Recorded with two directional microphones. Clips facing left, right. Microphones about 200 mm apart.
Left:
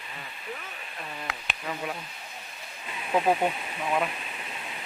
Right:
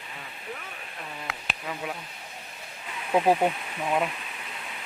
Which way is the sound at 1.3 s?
Centre (ahead or behind).